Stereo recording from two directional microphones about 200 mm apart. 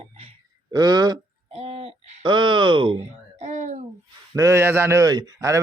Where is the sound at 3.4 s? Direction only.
35° right (ahead or behind).